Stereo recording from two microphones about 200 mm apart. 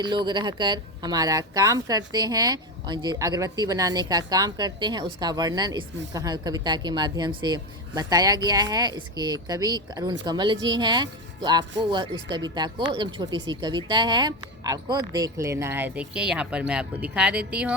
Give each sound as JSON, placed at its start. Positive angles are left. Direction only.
{"t": 0.0, "sound": "speech", "side_deg": -25}